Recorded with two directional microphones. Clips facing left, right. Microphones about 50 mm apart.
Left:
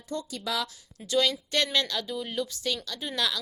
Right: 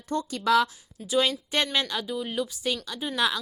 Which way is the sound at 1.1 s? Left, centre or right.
Right.